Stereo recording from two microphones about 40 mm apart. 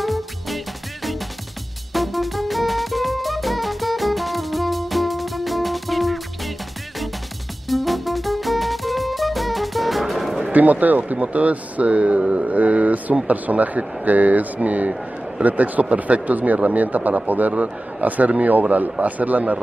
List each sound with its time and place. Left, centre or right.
0.0 s music: centre
2.0 s music: centre
7.6 s music: centre
10.5 s speech: right
12.4 s speech: right